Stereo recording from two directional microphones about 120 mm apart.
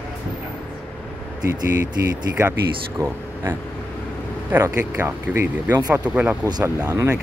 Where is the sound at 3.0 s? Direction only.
20° right (ahead or behind).